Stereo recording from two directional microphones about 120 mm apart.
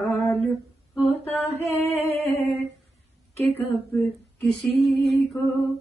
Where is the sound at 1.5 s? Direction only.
60° right (ahead or behind).